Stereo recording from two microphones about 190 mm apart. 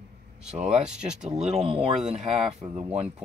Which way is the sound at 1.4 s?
35° right (ahead or behind).